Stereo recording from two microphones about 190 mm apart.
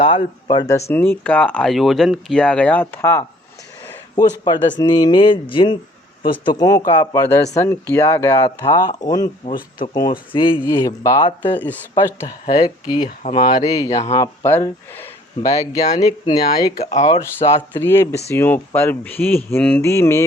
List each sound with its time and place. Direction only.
0.0 s speech: 25° left (ahead or behind)
9.5 s speech: 45° left (ahead or behind)
9.8 s speech: 25° left (ahead or behind)
11.9 s speech: 25° left (ahead or behind)
16.8 s speech: 35° left (ahead or behind)
17.1 s speech: 10° left (ahead or behind)